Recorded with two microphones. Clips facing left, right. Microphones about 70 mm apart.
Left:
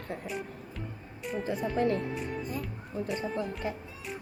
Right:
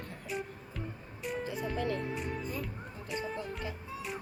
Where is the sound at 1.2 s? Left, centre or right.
Centre.